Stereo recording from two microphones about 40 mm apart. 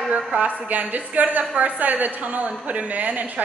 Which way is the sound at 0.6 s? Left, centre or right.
Right.